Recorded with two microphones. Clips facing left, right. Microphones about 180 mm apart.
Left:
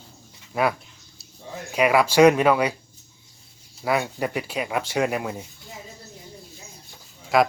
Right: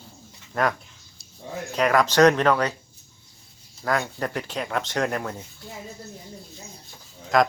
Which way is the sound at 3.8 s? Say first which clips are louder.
Left 2 dB; 10° left (ahead or behind).